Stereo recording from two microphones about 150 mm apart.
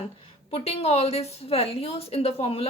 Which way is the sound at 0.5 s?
40° left (ahead or behind).